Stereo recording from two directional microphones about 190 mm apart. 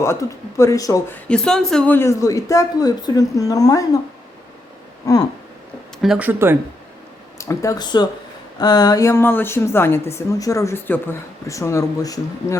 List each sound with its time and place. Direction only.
0.0 s speech: 15° left (ahead or behind)
1.3 s speech: 5° left (ahead or behind)
5.1 s speech: 20° left (ahead or behind)
6.0 s speech: 5° right (ahead or behind)
7.3 s speech: 15° left (ahead or behind)